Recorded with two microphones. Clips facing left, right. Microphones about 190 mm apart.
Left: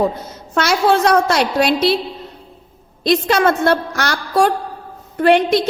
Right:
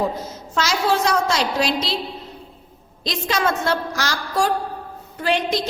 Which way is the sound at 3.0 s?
60° left (ahead or behind).